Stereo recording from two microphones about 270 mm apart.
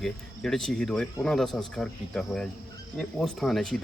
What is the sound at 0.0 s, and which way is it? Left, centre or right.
A man's voice, centre.